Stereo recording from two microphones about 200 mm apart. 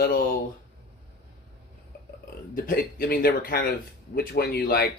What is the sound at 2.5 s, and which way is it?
Speech, 45° left (ahead or behind).